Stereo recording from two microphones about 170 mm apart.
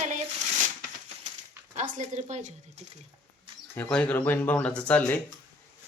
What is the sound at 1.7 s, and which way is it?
Speech, 45° right (ahead or behind).